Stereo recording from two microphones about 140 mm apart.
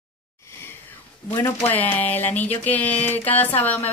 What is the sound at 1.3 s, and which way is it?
Speech, 15° left (ahead or behind).